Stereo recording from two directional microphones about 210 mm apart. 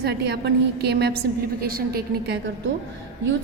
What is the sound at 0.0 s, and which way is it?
A woman's voice, 50° right (ahead or behind).